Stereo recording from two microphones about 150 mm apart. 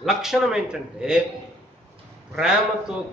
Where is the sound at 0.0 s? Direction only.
Centre (ahead or behind).